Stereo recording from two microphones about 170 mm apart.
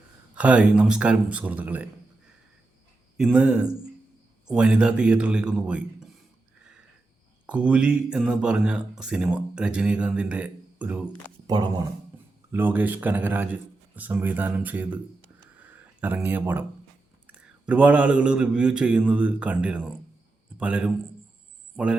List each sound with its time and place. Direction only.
0.3 s speech: 5° right (ahead or behind)
3.2 s speech: 5° right (ahead or behind)
7.4 s speech: 5° right (ahead or behind)
11.4 s speech: 25° right (ahead or behind)
12.5 s speech: 10° right (ahead or behind)
15.5 s a sound: 10° right (ahead or behind)
17.2 s speech: 10° right (ahead or behind)